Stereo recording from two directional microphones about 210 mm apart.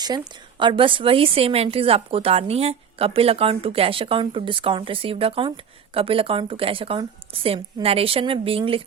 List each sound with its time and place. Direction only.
0.6 s speech: 25° right (ahead or behind)